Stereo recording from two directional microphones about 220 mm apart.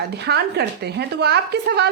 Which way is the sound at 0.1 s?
50° right (ahead or behind).